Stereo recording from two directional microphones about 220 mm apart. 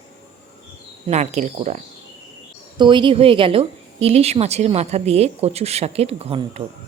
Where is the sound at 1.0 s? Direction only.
30° right (ahead or behind).